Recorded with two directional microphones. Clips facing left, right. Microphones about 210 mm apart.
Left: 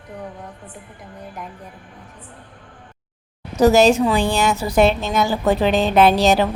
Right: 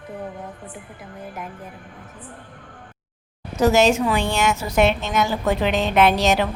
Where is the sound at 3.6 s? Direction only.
35° left (ahead or behind).